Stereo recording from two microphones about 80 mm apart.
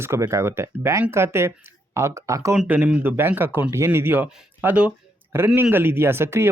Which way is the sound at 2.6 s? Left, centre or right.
Centre.